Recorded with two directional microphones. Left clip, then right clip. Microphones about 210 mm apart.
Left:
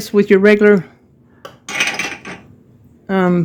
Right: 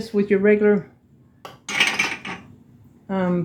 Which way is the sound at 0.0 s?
55° left (ahead or behind).